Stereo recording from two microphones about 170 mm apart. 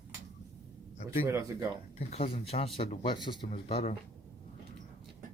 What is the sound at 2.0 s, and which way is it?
Speech, 35° left (ahead or behind).